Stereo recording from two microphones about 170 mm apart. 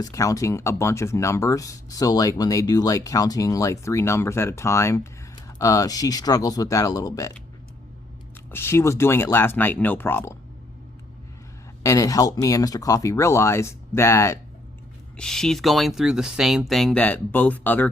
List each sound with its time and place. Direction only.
0.0 s speech: 20° left (ahead or behind)
8.4 s speech: 15° left (ahead or behind)
11.8 s speech: 20° left (ahead or behind)
15.2 s speech: 5° left (ahead or behind)